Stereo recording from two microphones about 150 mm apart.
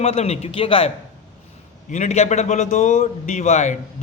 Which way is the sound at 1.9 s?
50° left (ahead or behind).